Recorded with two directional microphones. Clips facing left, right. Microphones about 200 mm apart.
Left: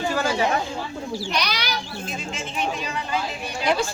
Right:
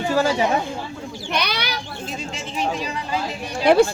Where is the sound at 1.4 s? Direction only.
55° right (ahead or behind).